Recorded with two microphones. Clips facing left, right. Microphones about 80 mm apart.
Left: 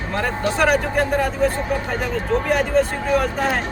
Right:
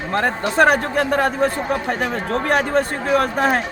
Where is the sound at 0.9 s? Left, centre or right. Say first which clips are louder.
Right 1 dB; right.